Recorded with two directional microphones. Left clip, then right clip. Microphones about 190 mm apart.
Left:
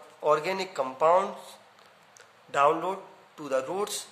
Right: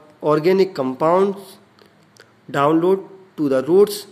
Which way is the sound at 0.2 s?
25° right (ahead or behind).